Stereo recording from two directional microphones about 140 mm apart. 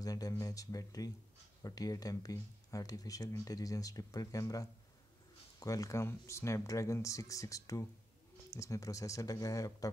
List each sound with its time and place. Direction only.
0.0 s speech: 25° left (ahead or behind)